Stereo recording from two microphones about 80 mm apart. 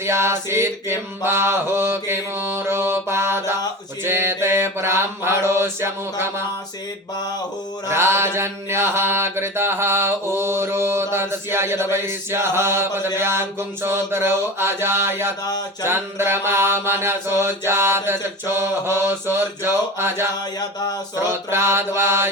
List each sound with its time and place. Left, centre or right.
0.0 s mantra: right
7.9 s mantra: right